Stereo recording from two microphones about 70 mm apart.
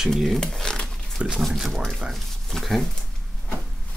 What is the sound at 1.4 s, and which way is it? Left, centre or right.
Speech, centre.